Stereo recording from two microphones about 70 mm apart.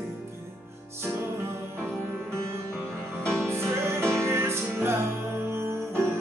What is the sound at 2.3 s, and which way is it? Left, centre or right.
Music, right.